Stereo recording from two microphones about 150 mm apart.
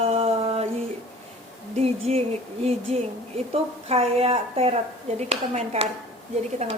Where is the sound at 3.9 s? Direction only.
45° right (ahead or behind).